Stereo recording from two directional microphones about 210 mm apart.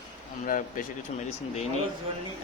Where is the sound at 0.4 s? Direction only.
40° left (ahead or behind).